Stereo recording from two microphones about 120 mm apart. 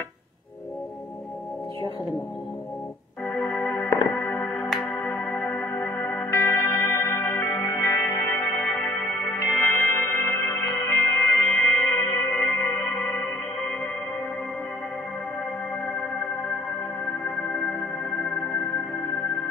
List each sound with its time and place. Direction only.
3.3 s music: 20° left (ahead or behind)
17.2 s music: 15° left (ahead or behind)